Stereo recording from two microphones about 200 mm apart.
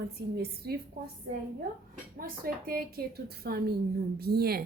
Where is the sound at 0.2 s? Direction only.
55° right (ahead or behind).